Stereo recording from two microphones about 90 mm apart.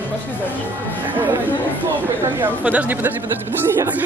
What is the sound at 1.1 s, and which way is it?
Speech, 20° right (ahead or behind).